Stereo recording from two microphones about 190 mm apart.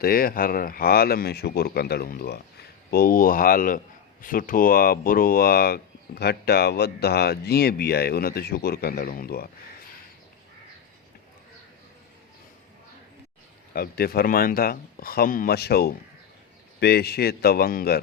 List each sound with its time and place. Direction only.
0.0 s speech: 50° left (ahead or behind)
13.7 s a man's voice: 55° left (ahead or behind)